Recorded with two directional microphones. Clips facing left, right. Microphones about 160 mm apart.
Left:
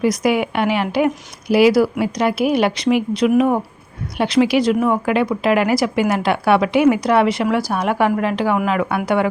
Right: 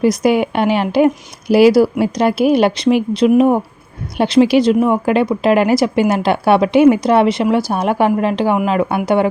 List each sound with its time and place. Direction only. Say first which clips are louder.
0.0 s a woman's voice: right 4 dB; 30° right (ahead or behind)